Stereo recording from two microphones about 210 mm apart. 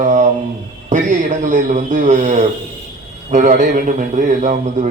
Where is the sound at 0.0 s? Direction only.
35° right (ahead or behind).